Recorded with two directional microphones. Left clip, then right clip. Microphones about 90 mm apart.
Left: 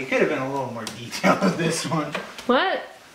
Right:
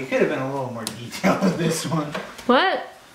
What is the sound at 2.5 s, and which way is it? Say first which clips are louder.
Speech: right 3 dB; 30° right (ahead or behind).